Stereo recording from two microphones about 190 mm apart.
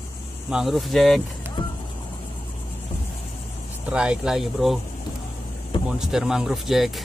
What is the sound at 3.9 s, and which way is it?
Speech, 5° right (ahead or behind).